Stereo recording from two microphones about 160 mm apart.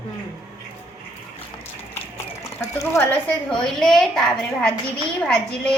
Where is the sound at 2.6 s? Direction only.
20° left (ahead or behind).